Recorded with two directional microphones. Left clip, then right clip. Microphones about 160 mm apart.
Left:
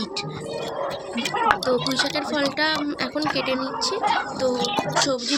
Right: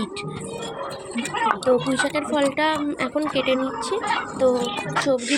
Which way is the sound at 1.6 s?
15° right (ahead or behind).